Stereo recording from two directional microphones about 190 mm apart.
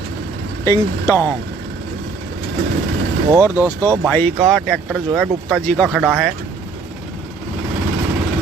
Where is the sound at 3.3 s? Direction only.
10° right (ahead or behind).